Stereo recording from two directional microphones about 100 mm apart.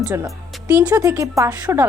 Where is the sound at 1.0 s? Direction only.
30° right (ahead or behind).